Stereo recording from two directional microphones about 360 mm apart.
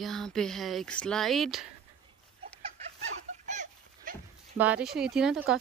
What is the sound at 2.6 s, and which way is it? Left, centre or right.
Fowl, centre.